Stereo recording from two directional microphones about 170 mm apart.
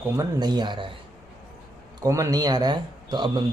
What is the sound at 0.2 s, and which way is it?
Speech, 25° right (ahead or behind).